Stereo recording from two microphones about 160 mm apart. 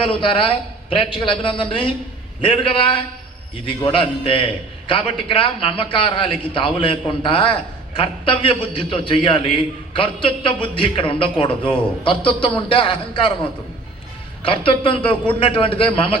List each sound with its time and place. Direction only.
0.0 s a man's voice: 30° left (ahead or behind)
14.4 s a man's voice: 35° left (ahead or behind)